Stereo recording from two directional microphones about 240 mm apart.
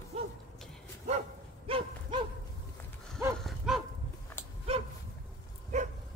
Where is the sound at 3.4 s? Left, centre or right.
Centre.